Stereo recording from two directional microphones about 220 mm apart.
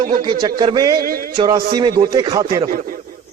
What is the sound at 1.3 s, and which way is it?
A man's voice, 20° right (ahead or behind).